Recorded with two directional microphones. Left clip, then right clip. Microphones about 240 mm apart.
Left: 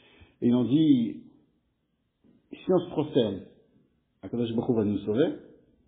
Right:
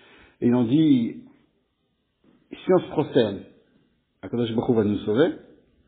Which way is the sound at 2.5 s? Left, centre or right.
Right.